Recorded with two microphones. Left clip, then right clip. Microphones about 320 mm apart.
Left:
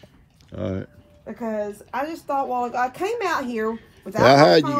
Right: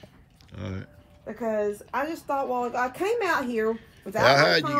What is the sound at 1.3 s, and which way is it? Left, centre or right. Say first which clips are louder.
Speech: right 1 dB; left.